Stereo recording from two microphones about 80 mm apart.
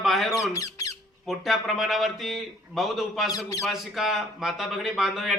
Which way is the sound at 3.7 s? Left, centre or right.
Centre.